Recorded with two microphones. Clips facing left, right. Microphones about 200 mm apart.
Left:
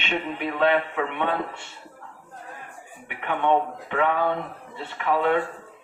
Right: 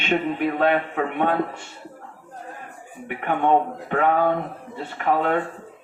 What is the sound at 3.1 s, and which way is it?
Speech, 45° right (ahead or behind).